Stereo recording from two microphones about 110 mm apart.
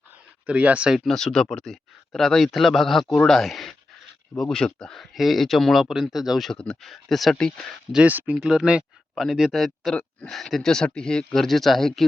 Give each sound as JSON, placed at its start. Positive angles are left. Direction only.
{"t": 0.4, "sound": "speech", "side_deg": -10}
{"t": 7.9, "sound": "speech", "side_deg": -15}